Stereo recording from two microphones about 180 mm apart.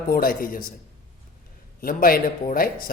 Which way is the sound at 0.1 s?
50° left (ahead or behind).